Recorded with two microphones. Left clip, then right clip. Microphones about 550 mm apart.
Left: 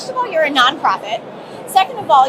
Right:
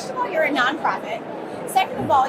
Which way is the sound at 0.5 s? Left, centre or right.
Left.